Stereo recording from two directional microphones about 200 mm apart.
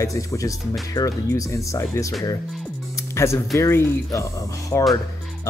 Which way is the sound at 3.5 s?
15° left (ahead or behind).